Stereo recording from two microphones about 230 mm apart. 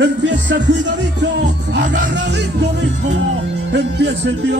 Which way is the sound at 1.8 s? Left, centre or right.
Right.